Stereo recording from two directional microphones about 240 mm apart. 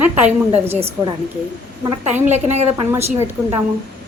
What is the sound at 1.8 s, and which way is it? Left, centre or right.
Speech, right.